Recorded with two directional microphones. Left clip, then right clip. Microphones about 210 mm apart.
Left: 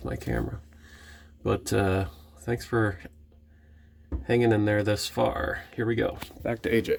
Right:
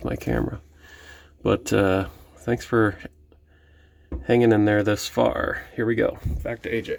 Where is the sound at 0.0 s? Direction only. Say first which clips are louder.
Right 6 dB; 30° right (ahead or behind).